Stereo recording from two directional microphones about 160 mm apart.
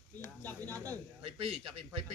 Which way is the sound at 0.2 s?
10° left (ahead or behind).